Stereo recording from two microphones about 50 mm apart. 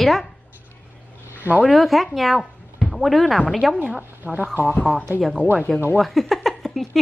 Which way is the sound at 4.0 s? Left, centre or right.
Right.